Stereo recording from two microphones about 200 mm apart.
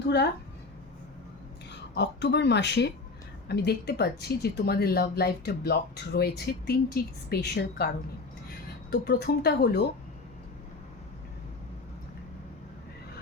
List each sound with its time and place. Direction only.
2.0 s a woman's voice: 60° left (ahead or behind)